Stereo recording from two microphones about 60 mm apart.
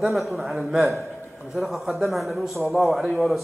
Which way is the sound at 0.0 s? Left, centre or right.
Centre.